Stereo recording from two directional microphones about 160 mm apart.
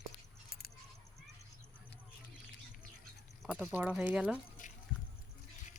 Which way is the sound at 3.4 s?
10° right (ahead or behind).